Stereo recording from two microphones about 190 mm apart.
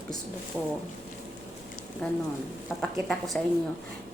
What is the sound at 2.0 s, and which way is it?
A woman's voice, 5° left (ahead or behind).